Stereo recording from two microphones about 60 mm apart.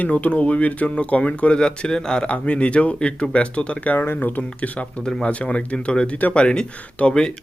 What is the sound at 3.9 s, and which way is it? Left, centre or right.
Speech, left.